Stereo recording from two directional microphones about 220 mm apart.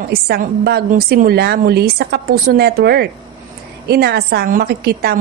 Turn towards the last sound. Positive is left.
turn(degrees=-45)  # may be behind; listen again after turning